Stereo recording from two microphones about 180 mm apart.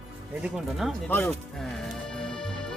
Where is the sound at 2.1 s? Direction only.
5° left (ahead or behind).